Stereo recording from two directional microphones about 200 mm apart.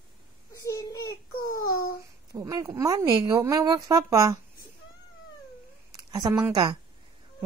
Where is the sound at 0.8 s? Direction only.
20° left (ahead or behind).